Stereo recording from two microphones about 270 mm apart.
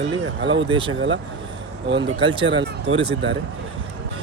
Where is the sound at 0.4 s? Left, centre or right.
Right.